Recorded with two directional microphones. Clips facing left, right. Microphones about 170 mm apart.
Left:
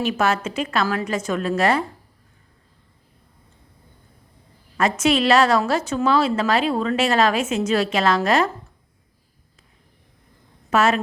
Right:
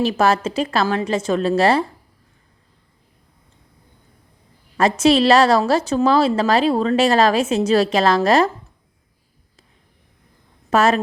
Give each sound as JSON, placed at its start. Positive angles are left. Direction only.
{"t": 0.0, "sound": "a woman's voice", "side_deg": -35}
{"t": 4.8, "sound": "a woman's voice", "side_deg": -35}
{"t": 10.7, "sound": "a woman's voice", "side_deg": -35}